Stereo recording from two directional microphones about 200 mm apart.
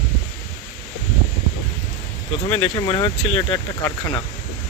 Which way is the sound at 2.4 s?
25° left (ahead or behind).